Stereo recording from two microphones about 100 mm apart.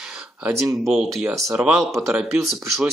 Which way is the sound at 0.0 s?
5° right (ahead or behind).